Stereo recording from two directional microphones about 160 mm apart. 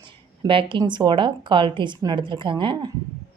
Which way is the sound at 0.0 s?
30° right (ahead or behind).